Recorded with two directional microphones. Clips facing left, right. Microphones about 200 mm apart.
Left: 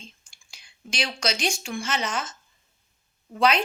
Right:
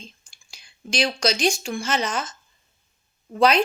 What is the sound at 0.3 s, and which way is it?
Speech, 35° right (ahead or behind).